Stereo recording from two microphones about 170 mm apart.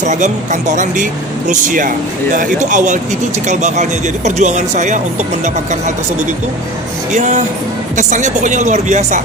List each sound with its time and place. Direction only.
0.0 s speech: 45° right (ahead or behind)
7.1 s speech: 45° right (ahead or behind)